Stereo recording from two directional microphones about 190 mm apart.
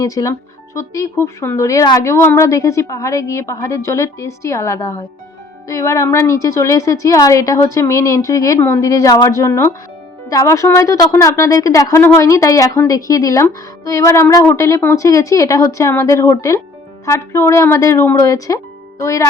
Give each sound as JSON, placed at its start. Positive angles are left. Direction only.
{"t": 0.0, "sound": "speech", "side_deg": 15}